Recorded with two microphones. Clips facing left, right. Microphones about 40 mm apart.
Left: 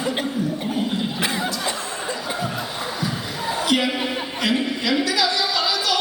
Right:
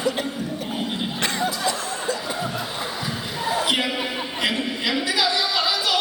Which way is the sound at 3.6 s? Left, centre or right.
Centre.